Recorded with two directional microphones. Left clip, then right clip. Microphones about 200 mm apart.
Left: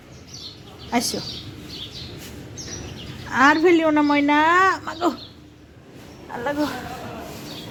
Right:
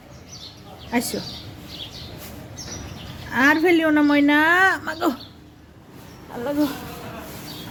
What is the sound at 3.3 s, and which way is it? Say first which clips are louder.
A woman's voice: left 1 dB; 15° right (ahead or behind).